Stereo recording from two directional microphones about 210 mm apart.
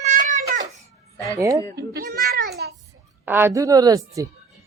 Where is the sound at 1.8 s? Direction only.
50° right (ahead or behind).